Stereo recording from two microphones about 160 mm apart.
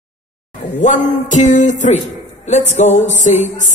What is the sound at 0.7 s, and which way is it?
A woman's voice, 50° left (ahead or behind).